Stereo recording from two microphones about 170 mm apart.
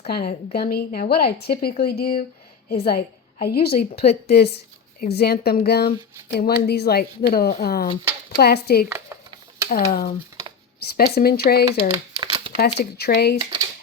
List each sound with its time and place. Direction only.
0.1 s a woman's voice: 65° left (ahead or behind)
6.3 s a woman's voice: 60° left (ahead or behind)
8.9 s a sound: 20° right (ahead or behind)
9.6 s a woman's voice: 55° left (ahead or behind)
12.1 s crumpling: 25° right (ahead or behind)
12.5 s a woman's voice: 70° left (ahead or behind)